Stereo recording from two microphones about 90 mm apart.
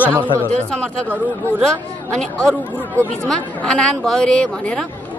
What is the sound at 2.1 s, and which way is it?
Speech, 10° left (ahead or behind).